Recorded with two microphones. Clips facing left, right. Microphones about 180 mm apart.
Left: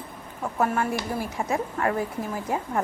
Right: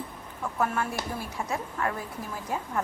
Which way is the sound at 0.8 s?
55° left (ahead or behind).